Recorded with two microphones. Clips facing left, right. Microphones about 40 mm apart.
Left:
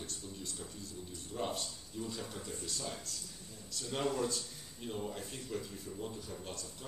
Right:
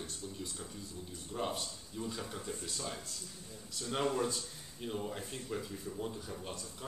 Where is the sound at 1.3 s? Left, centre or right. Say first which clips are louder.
Right 1 dB; centre.